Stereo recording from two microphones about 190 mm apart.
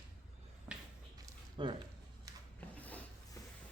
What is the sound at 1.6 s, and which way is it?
Speech, 25° right (ahead or behind).